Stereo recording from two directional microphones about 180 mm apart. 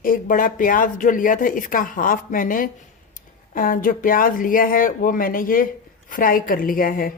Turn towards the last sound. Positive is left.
turn(degrees=50)  # may be behind; listen again after turning